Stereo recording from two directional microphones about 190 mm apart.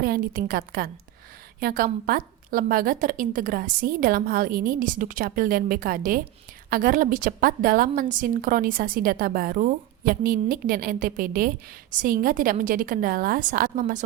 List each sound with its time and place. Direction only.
0.0 s a woman's voice: 50° right (ahead or behind)